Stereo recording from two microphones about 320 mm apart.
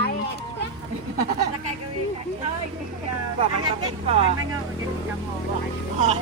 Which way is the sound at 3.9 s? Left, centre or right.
Centre.